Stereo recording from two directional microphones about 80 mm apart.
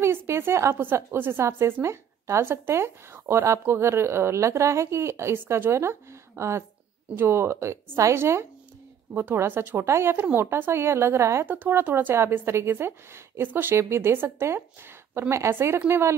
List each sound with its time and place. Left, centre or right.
0.0 s a sound: right
0.7 s a woman's voice: right
11.4 s a woman's voice: right